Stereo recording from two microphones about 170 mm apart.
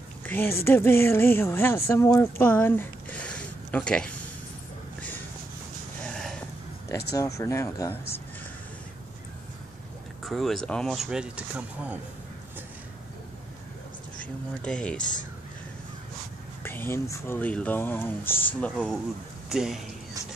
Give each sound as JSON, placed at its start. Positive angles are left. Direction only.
{"t": 0.2, "sound": "a woman's voice", "side_deg": 10}
{"t": 6.0, "sound": "a sound", "side_deg": 5}
{"t": 7.2, "sound": "speech", "side_deg": 20}
{"t": 10.2, "sound": "speech", "side_deg": 0}
{"t": 14.2, "sound": "speech", "side_deg": 5}
{"t": 15.0, "sound": "speech", "side_deg": 50}
{"t": 16.6, "sound": "speech", "side_deg": 10}
{"t": 19.5, "sound": "speech", "side_deg": -5}